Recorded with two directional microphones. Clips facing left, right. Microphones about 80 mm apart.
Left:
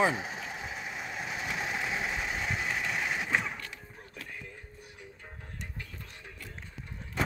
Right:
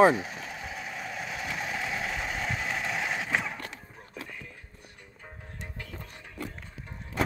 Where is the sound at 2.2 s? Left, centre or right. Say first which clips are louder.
Right 1 dB; centre.